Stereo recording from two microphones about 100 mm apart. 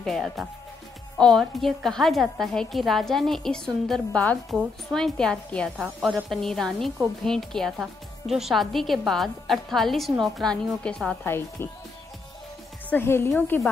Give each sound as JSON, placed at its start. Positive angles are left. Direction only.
{"t": 0.0, "sound": "a woman's voice", "side_deg": 0}
{"t": 5.8, "sound": "a woman's voice", "side_deg": -5}
{"t": 11.2, "sound": "speech", "side_deg": 25}
{"t": 12.9, "sound": "speech", "side_deg": 25}